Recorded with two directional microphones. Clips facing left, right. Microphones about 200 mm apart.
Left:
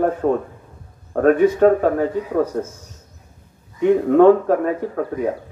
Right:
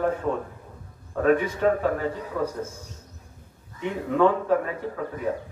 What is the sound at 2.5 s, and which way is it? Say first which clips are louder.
Speech: left 8 dB; 60° left (ahead or behind).